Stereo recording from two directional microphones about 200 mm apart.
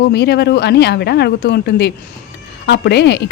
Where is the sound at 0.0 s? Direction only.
55° left (ahead or behind).